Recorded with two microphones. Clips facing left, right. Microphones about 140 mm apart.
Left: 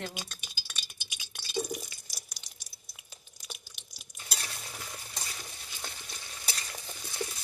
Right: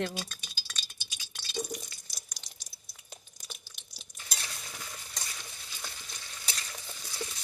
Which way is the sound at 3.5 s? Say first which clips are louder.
Left 2 dB; 5° left (ahead or behind).